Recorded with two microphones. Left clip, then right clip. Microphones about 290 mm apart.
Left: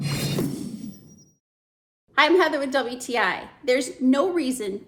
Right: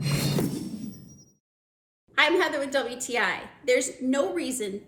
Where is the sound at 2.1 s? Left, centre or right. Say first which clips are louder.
Left 4 dB; centre.